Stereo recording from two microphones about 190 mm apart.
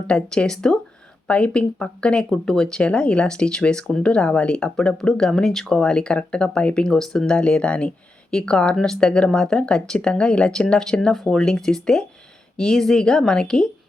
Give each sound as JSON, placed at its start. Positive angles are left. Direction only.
{"t": 0.1, "sound": "speech", "side_deg": 5}